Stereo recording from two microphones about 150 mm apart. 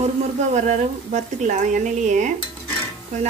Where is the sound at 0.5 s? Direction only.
50° right (ahead or behind).